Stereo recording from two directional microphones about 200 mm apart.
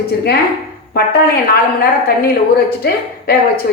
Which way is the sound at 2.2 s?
50° left (ahead or behind).